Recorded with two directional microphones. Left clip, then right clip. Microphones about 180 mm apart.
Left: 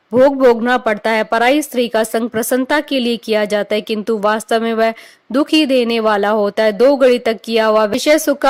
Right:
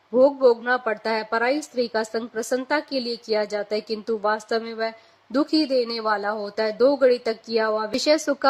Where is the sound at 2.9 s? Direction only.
90° left.